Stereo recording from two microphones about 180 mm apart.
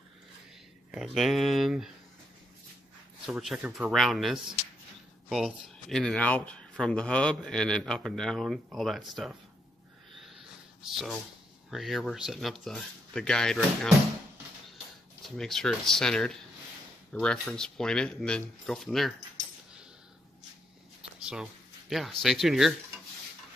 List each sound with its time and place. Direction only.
0.9 s speech: centre (ahead or behind)
3.3 s speech: centre (ahead or behind)
10.2 s a sound: centre (ahead or behind)
11.7 s speech: centre (ahead or behind)
15.2 s speech: centre (ahead or behind)
21.0 s speech: 5° right (ahead or behind)